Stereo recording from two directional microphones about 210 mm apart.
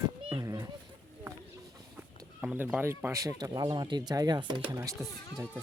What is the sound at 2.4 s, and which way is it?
Speech, 5° right (ahead or behind).